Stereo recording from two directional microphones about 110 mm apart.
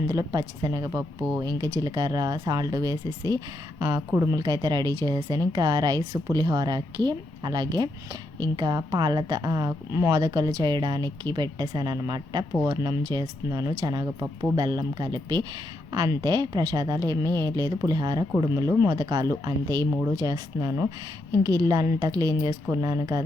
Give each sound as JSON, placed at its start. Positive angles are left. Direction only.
{"t": 0.1, "sound": "a woman's voice", "side_deg": -35}
{"t": 18.9, "sound": "a woman's voice", "side_deg": -35}